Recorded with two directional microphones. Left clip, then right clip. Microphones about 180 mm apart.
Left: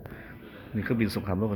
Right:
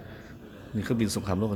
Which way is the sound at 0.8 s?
5° right (ahead or behind).